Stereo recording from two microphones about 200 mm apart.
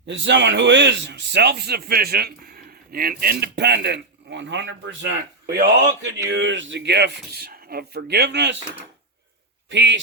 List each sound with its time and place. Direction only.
0.0 s speech: 65° right (ahead or behind)
9.6 s speech: 65° right (ahead or behind)